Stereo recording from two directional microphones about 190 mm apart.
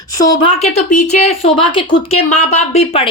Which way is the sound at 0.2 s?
25° left (ahead or behind).